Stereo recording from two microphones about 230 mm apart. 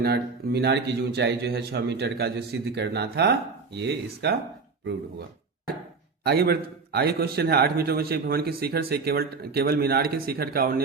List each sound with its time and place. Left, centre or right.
0.0 s a man's voice: right
6.2 s a man's voice: right